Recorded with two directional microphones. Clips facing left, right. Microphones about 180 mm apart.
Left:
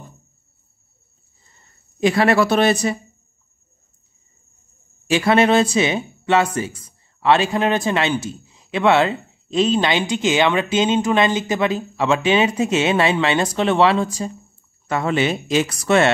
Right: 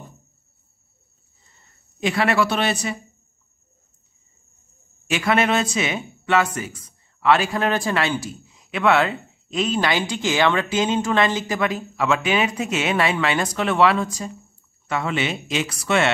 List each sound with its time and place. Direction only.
2.0 s speech: 40° left (ahead or behind)
5.0 s speech: 30° left (ahead or behind)
14.9 s speech: 40° left (ahead or behind)